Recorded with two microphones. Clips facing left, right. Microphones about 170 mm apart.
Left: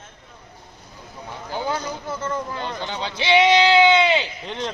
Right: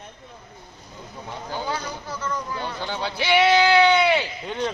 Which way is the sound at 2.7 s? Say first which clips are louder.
Left 1 dB; 20° left (ahead or behind).